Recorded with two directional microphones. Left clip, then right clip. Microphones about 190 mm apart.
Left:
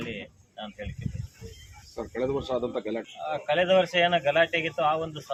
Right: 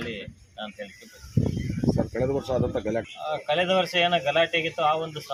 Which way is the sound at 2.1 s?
55° right (ahead or behind).